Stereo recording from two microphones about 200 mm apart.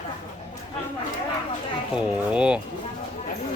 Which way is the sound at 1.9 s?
5° right (ahead or behind).